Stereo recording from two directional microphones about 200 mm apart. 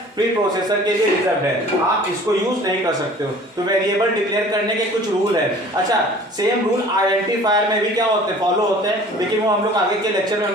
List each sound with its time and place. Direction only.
7.4 s speech: 20° right (ahead or behind)